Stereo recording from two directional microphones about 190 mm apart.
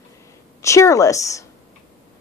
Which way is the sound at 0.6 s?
15° left (ahead or behind).